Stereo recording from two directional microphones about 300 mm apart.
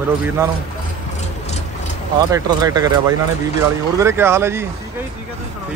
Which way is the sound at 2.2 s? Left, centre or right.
Centre.